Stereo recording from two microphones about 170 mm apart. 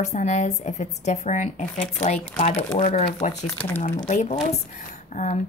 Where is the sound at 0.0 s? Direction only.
45° left (ahead or behind).